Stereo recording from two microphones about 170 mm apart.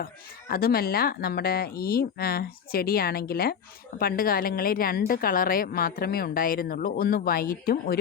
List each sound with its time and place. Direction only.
0.0 s a woman's voice: 60° left (ahead or behind)